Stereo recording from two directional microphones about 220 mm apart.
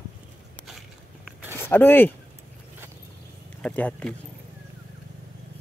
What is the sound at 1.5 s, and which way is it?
Speech, 10° left (ahead or behind).